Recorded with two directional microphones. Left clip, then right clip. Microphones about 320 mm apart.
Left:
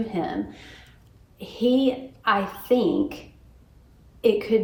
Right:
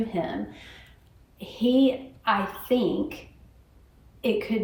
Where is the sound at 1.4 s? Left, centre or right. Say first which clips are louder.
Left 1 dB; centre.